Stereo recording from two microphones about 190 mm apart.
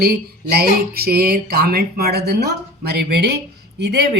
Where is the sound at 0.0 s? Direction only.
55° right (ahead or behind).